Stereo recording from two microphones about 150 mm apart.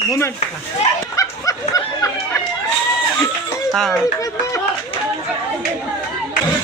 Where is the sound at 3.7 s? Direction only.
5° left (ahead or behind).